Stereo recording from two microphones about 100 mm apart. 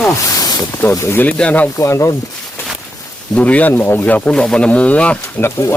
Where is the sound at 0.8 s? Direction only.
25° left (ahead or behind).